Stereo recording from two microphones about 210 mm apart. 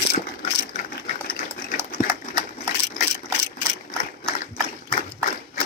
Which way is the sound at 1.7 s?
20° right (ahead or behind).